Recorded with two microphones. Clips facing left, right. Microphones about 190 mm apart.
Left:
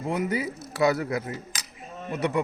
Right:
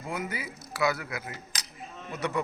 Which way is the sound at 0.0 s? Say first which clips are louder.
Left 7 dB; 20° left (ahead or behind).